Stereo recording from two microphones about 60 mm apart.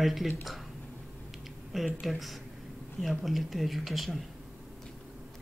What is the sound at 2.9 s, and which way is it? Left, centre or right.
Speech, centre.